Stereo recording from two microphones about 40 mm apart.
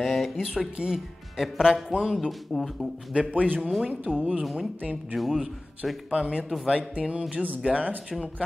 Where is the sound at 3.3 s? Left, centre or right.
Right.